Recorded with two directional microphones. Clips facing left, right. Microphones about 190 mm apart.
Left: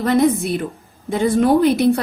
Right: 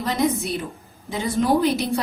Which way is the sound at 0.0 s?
55° left (ahead or behind).